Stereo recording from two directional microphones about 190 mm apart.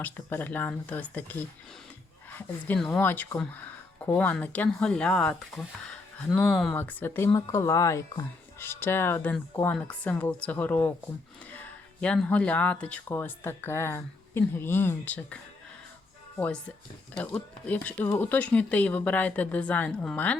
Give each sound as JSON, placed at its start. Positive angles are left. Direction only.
{"t": 0.0, "sound": "speech", "side_deg": 10}
{"t": 16.4, "sound": "speech", "side_deg": 5}